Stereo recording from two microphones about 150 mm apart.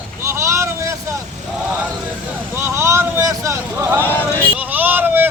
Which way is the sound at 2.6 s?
20° right (ahead or behind).